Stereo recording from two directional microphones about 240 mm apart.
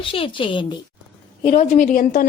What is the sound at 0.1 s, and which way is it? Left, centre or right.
A woman's voice, left.